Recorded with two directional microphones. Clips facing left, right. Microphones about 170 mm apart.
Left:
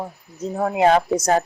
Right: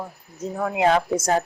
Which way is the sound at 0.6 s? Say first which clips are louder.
Left 3 dB; 35° left (ahead or behind).